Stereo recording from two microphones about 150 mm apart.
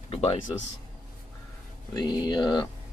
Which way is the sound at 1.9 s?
30° left (ahead or behind).